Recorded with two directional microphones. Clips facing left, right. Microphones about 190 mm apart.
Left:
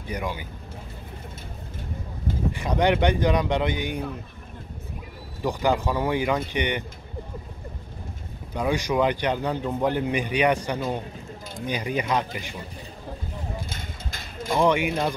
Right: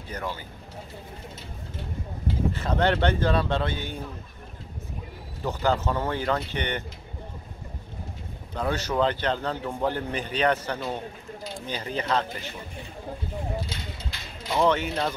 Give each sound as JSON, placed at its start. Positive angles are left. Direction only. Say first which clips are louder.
{"t": 0.1, "sound": "a man's voice", "louder": "left 3 dB", "side_deg": 15}
{"t": 2.5, "sound": "a man's voice", "louder": "left 3 dB", "side_deg": 15}
{"t": 5.4, "sound": "a man's voice", "louder": "left 2 dB", "side_deg": 15}
{"t": 8.5, "sound": "a man's voice", "louder": "left 2 dB", "side_deg": 10}
{"t": 13.7, "sound": "mechanisms", "louder": "even", "side_deg": 50}
{"t": 14.6, "sound": "a man's voice", "louder": "left 2 dB", "side_deg": 10}